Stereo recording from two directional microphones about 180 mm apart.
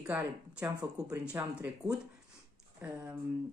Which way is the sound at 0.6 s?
20° right (ahead or behind).